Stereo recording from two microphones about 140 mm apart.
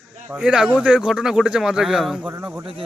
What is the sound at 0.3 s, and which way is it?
A man's voice, 10° right (ahead or behind).